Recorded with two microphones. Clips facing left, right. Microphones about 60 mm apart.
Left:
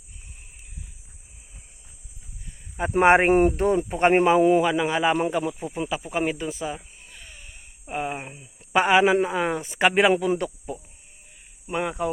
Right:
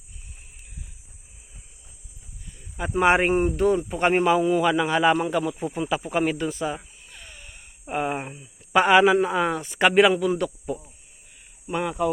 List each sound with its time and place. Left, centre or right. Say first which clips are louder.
3.0 s speech: left 3 dB; left
4.6 s speech: right 2 dB; centre
5.7 s speech: right 4 dB; centre
6.7 s a sound: right 2 dB; centre
7.9 s speech: right 3 dB; centre
8.7 s speech: right 2 dB; centre
9.6 s a man's voice: right 3 dB; centre